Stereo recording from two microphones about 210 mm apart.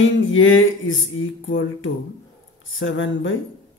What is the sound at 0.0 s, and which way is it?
Speech, 65° left (ahead or behind).